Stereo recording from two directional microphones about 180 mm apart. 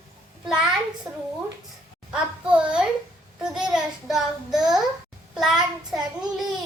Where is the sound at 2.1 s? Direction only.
5° right (ahead or behind).